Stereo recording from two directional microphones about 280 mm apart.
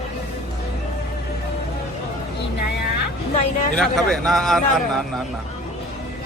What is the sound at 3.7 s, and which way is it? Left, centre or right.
A man's voice, centre.